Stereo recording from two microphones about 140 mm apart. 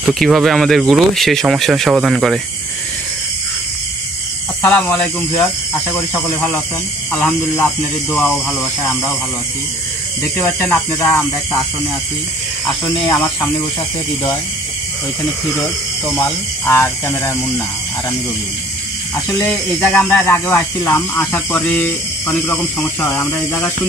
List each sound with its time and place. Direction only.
0.1 s speech: centre (ahead or behind)
4.6 s speech: 15° left (ahead or behind)
10.2 s speech: 15° left (ahead or behind)
12.8 s speech: 35° left (ahead or behind)
15.4 s speech: 5° left (ahead or behind)
16.1 s speech: 20° left (ahead or behind)
19.1 s speech: 20° left (ahead or behind)